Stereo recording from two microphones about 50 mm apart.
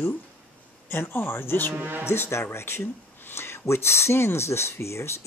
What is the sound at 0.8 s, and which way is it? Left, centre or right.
Speech, left.